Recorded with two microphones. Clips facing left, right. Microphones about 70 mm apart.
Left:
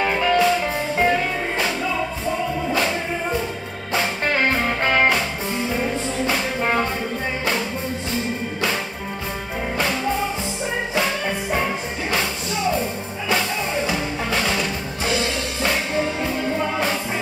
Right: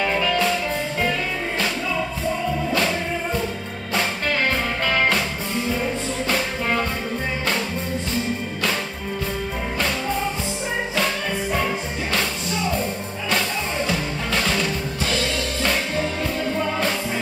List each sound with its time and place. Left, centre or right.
0.0 s music: left
2.7 s music: centre
4.3 s music: left
6.6 s music: left
11.6 s music: centre
13.8 s music: centre